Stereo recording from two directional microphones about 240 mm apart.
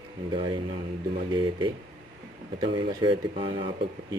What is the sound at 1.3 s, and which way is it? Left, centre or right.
Speech, centre.